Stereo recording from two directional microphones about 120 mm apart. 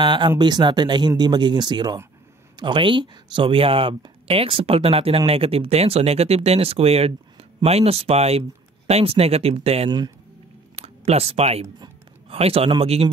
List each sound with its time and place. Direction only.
0.0 s speech: 40° right (ahead or behind)
9.8 s speech: 35° right (ahead or behind)
10.8 s speech: 60° right (ahead or behind)